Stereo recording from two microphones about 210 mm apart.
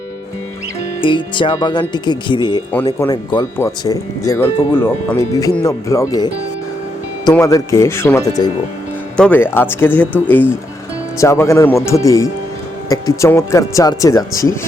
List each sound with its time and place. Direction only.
1.0 s speech: 25° left (ahead or behind)
7.3 s speech: 15° left (ahead or behind)
9.1 s speech: 5° left (ahead or behind)